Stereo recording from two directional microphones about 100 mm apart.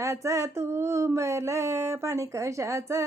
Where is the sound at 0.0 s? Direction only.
30° right (ahead or behind).